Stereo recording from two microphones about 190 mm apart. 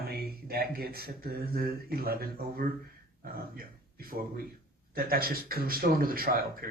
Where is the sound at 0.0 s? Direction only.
55° right (ahead or behind).